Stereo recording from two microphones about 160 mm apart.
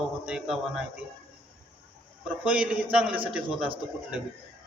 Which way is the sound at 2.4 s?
10° right (ahead or behind).